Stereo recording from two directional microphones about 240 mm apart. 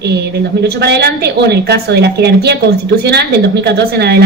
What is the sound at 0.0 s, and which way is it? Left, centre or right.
A woman's voice, right.